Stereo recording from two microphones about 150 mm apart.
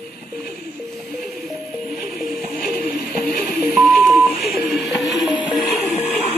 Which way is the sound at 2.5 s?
70° left (ahead or behind).